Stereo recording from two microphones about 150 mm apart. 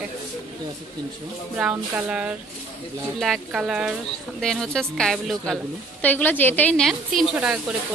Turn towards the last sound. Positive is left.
turn(degrees=-5)  # may be behind; listen again after turning